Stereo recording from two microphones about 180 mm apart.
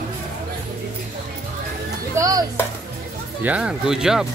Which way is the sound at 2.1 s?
20° right (ahead or behind).